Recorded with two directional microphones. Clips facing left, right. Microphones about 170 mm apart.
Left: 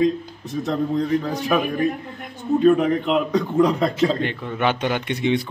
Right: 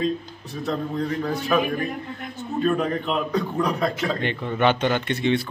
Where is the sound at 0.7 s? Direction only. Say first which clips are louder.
Left 4 dB; 20° left (ahead or behind).